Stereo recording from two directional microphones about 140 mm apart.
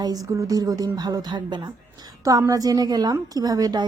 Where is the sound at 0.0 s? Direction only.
25° right (ahead or behind).